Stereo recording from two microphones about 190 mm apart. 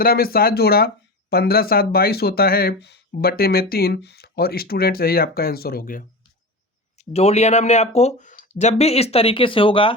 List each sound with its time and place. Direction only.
0.0 s speech: 50° left (ahead or behind)
7.0 s speech: 35° left (ahead or behind)